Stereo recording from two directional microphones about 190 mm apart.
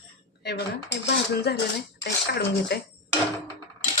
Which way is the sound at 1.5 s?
60° left (ahead or behind).